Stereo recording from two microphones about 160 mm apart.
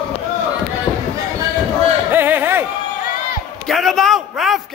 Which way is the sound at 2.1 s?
15° right (ahead or behind).